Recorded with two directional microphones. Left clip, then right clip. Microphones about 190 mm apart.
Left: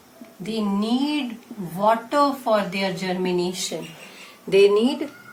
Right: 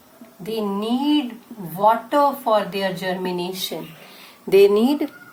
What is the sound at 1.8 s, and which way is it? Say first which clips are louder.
Speech: right 3 dB; 25° right (ahead or behind).